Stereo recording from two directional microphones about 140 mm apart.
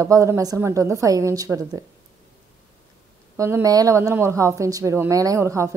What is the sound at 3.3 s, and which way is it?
A woman's voice, 20° right (ahead or behind).